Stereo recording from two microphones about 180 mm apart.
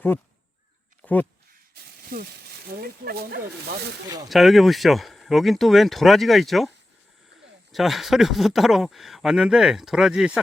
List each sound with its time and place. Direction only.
1.0 s speech: 10° left (ahead or behind)
1.8 s speech: 60° right (ahead or behind)
4.3 s speech: centre (ahead or behind)